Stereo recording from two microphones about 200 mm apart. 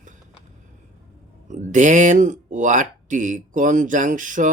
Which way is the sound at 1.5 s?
40° right (ahead or behind).